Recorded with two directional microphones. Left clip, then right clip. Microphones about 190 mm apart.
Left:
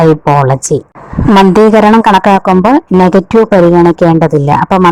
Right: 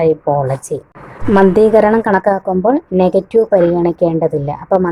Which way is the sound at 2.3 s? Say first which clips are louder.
Left 7 dB; 55° left (ahead or behind).